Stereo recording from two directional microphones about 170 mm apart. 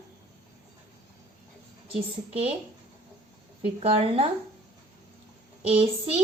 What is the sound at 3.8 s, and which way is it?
Speech, 35° right (ahead or behind).